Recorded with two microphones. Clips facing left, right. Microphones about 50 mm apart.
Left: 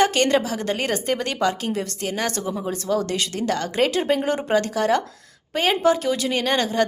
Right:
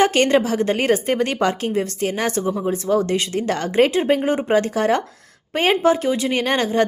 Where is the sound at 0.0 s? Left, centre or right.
Right.